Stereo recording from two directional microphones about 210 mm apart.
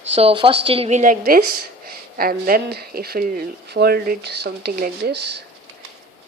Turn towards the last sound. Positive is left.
turn(degrees=-50)  # may be behind; listen again after turning